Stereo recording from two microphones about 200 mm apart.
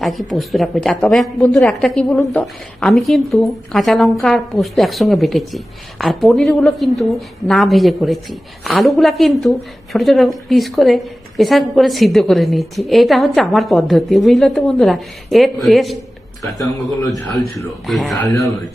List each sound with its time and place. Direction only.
0.0 s a woman's voice: centre (ahead or behind)
17.6 s a woman's voice: centre (ahead or behind)